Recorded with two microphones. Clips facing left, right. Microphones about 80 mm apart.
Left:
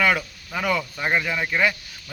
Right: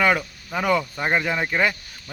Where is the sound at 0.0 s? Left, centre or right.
Right.